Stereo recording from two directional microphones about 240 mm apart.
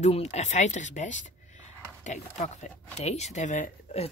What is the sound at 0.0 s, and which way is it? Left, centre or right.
Speech, left.